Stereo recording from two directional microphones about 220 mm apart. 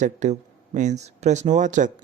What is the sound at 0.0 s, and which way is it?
A man's voice, 35° right (ahead or behind).